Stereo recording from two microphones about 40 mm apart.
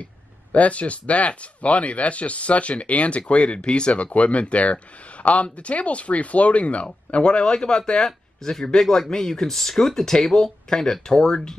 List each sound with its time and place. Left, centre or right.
0.0 s speech: left; by 11.5 s centre